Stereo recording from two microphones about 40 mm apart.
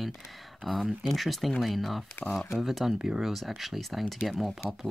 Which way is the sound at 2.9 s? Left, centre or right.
Centre.